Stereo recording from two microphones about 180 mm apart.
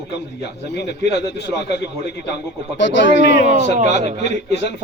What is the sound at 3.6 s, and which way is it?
Speech, 40° right (ahead or behind).